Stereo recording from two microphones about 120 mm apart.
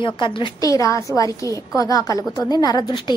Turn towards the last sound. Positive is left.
turn(degrees=35)  # may be behind; listen again after turning